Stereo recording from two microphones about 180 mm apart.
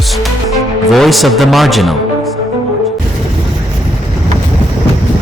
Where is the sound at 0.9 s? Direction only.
Centre (ahead or behind).